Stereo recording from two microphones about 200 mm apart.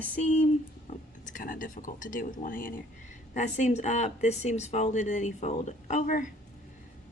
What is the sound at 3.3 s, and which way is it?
A woman's voice, 35° left (ahead or behind).